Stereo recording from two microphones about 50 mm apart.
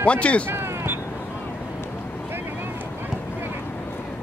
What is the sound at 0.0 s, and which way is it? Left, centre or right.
Speech, left.